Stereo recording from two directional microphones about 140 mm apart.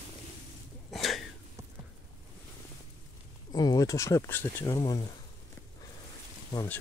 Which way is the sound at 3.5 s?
25° left (ahead or behind).